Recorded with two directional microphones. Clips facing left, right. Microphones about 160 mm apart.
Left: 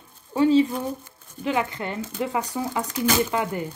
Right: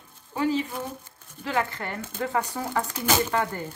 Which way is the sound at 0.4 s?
25° left (ahead or behind).